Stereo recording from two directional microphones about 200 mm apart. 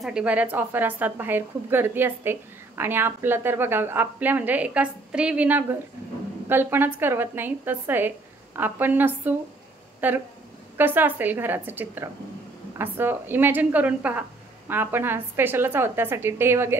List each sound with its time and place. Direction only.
0.0 s a woman's voice: 5° right (ahead or behind)